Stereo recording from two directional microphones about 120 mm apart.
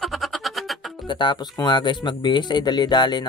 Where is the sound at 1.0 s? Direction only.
40° left (ahead or behind).